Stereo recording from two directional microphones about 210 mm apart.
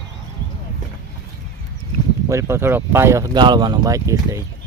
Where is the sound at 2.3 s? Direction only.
15° right (ahead or behind).